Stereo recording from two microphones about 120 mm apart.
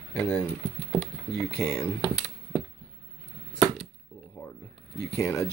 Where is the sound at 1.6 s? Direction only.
20° left (ahead or behind).